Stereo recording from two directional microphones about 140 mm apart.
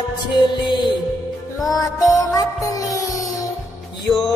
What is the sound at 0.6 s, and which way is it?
Music, 35° left (ahead or behind).